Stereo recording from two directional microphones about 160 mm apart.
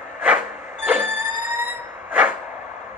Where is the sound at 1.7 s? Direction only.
10° right (ahead or behind).